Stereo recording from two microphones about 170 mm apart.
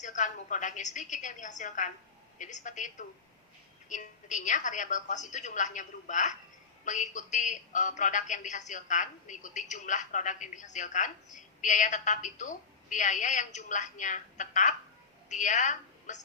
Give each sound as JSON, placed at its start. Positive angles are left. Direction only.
{"t": 0.0, "sound": "a woman's voice", "side_deg": 45}